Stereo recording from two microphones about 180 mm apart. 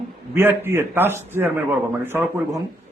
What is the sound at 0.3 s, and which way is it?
A man's voice, 10° right (ahead or behind).